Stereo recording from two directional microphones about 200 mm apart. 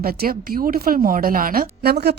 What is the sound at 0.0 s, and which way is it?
Speech, 50° right (ahead or behind).